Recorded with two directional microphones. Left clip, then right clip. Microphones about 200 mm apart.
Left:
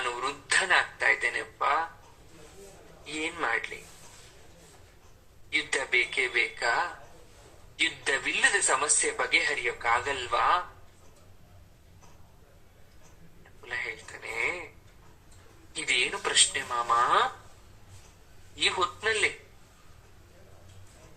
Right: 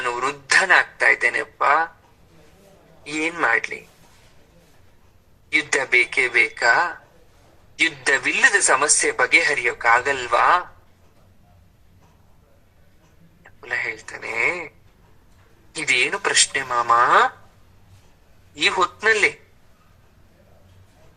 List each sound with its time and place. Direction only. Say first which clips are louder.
0.0 s a man's voice: right 8 dB; 35° right (ahead or behind)
3.0 s speech: right 10 dB; 35° right (ahead or behind)
5.5 s speech: right 9 dB; 35° right (ahead or behind)
13.4 s speech: right 9 dB; 35° right (ahead or behind)
15.7 s speech: right 8 dB; 35° right (ahead or behind)
18.5 s speech: right 8 dB; 35° right (ahead or behind)